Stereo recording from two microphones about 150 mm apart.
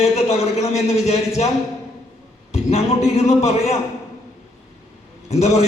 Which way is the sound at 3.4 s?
45° left (ahead or behind).